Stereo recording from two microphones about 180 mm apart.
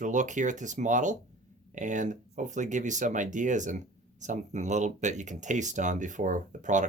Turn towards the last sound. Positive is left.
turn(degrees=-45)  # may be behind; listen again after turning